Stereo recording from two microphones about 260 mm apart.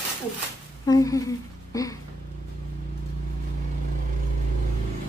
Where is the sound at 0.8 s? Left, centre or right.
Centre.